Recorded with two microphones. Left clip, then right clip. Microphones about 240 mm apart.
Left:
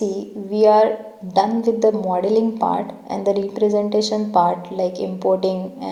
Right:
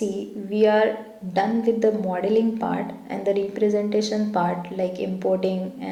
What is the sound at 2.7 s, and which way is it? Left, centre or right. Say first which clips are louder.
A woman's voice: left 6 dB; centre.